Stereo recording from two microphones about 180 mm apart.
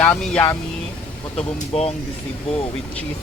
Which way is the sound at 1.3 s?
35° left (ahead or behind).